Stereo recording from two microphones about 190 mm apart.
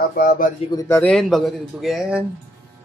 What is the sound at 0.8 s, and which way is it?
Speech, 15° left (ahead or behind).